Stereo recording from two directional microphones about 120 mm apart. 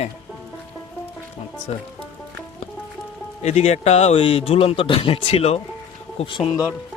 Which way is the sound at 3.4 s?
65° left (ahead or behind).